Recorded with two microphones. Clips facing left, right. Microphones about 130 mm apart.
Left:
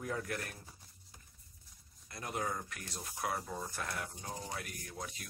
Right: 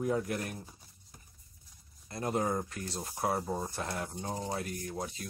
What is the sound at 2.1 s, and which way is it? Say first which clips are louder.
Speech: right 7 dB; 30° right (ahead or behind).